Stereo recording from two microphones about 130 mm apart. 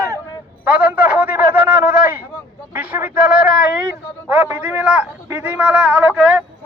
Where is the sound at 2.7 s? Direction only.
10° right (ahead or behind).